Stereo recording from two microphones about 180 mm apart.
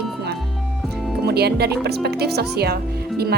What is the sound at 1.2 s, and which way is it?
A woman's voice, 65° right (ahead or behind).